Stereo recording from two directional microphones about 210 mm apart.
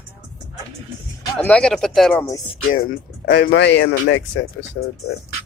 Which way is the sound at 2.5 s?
40° left (ahead or behind).